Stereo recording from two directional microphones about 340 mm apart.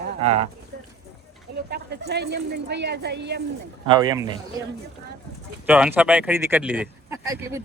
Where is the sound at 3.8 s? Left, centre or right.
Centre.